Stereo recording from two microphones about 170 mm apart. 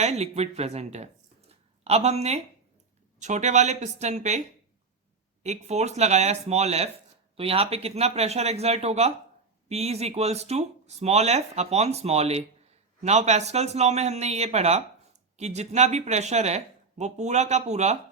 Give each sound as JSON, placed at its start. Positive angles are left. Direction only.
{"t": 0.0, "sound": "speech", "side_deg": -40}